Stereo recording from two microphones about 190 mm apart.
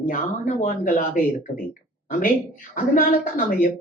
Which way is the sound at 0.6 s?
45° left (ahead or behind).